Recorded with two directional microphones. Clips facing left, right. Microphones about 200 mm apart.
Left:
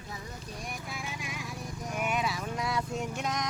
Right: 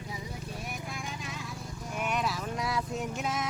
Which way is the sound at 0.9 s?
10° left (ahead or behind).